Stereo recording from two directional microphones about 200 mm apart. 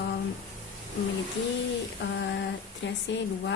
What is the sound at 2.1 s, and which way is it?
A woman's voice, 65° left (ahead or behind).